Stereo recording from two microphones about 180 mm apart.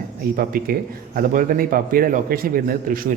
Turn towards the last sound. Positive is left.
turn(degrees=-50)  # may be behind; listen again after turning